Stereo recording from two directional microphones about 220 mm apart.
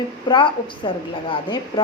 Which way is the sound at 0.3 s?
20° left (ahead or behind).